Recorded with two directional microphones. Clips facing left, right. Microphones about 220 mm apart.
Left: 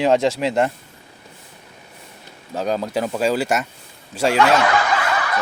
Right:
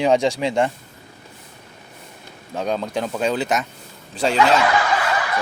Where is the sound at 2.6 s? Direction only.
5° left (ahead or behind).